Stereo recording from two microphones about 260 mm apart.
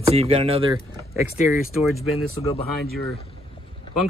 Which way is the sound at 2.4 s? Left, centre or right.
Left.